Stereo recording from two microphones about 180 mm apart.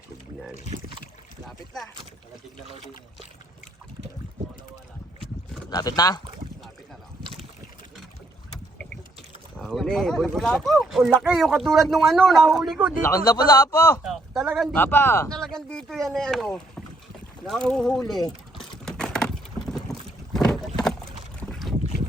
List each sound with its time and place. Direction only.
1.5 s speech: centre (ahead or behind)
5.7 s a man's voice: 20° left (ahead or behind)
9.6 s speech: centre (ahead or behind)
13.0 s a man's voice: 15° left (ahead or behind)
14.0 s speech: centre (ahead or behind)
14.8 s a man's voice: 10° left (ahead or behind)
15.4 s speech: centre (ahead or behind)
18.9 s wood: 5° left (ahead or behind)
19.9 s boat: 5° left (ahead or behind)